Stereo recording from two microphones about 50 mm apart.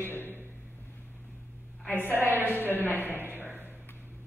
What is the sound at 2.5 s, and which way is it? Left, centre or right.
Speech, left.